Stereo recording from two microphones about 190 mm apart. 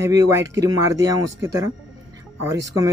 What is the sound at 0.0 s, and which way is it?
Speech, 15° right (ahead or behind).